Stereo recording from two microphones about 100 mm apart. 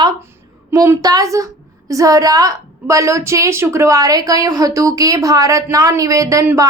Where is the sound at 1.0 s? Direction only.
35° right (ahead or behind).